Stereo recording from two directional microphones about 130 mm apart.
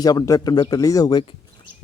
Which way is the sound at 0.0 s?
30° left (ahead or behind).